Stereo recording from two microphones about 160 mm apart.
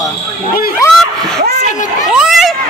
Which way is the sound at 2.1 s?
Centre (ahead or behind).